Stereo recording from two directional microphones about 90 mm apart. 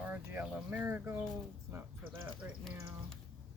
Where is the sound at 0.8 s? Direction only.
25° right (ahead or behind).